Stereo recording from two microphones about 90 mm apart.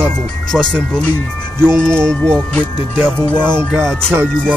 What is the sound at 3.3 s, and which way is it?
Speech, 25° right (ahead or behind).